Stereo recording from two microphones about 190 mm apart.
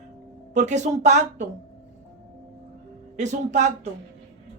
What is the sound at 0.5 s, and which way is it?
Speech, 40° right (ahead or behind).